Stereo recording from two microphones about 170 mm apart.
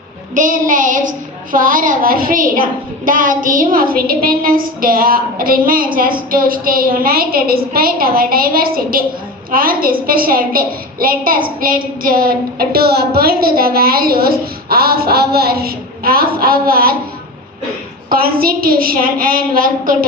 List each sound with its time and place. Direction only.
0.3 s child singing: 50° right (ahead or behind)
1.5 s a woman's voice: 55° right (ahead or behind)
18.1 s a woman's voice: 60° right (ahead or behind)